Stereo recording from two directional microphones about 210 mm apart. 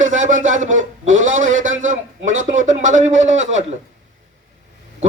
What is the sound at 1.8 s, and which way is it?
A man's voice, 35° right (ahead or behind).